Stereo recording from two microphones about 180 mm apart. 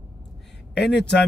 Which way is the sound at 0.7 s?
70° left (ahead or behind).